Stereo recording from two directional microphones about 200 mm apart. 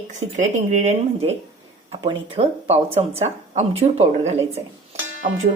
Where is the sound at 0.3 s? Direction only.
35° right (ahead or behind).